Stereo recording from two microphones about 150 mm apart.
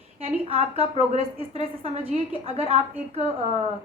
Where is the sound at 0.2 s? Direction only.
40° right (ahead or behind).